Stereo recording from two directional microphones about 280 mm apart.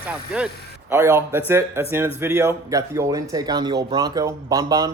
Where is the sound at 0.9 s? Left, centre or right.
Centre.